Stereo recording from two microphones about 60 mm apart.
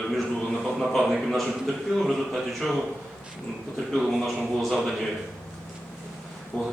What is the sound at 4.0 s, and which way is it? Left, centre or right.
Speech, centre.